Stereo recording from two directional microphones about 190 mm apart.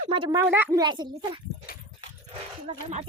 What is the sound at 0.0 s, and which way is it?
Speech, 30° right (ahead or behind).